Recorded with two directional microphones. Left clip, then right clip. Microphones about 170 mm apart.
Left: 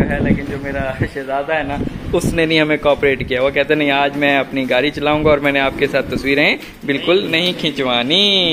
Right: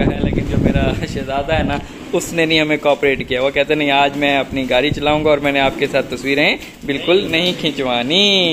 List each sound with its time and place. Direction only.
2.1 s speech: centre (ahead or behind)